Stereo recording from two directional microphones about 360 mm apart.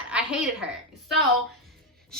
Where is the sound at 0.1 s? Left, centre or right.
Centre.